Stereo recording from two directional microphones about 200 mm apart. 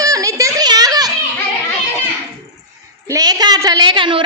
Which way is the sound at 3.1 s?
20° right (ahead or behind).